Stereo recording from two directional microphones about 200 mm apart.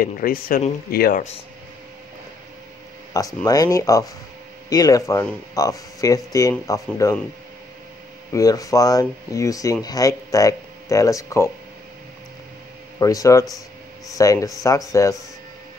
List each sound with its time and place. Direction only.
0.0 s speech: 45° left (ahead or behind)
3.1 s a sound: 15° left (ahead or behind)
3.4 s speech: 20° left (ahead or behind)
8.3 s speech: 15° left (ahead or behind)
13.0 s speech: 15° left (ahead or behind)